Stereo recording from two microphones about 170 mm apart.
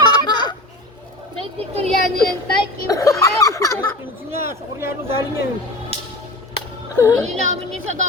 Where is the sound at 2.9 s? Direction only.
20° left (ahead or behind).